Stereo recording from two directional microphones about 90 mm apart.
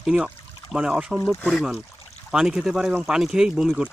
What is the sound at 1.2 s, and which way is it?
Speech, 30° left (ahead or behind).